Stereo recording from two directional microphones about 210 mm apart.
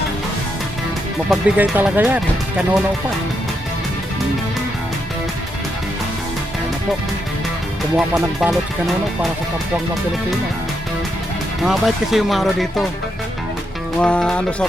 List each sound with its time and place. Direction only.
1.3 s speech: 5° right (ahead or behind)
7.9 s speech: 5° right (ahead or behind)
11.6 s speech: centre (ahead or behind)
14.0 s speech: 5° left (ahead or behind)